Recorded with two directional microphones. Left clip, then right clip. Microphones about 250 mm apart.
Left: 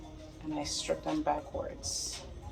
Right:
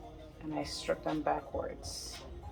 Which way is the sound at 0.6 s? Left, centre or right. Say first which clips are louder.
Left 1 dB; centre.